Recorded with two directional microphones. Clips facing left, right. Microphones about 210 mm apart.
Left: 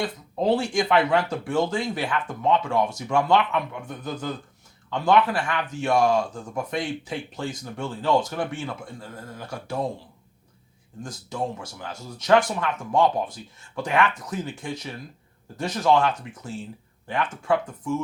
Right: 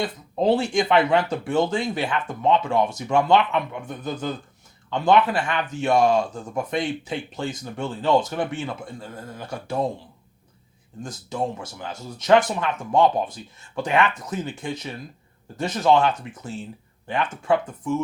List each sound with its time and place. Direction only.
0.0 s speech: 20° right (ahead or behind)
11.0 s speech: 20° right (ahead or behind)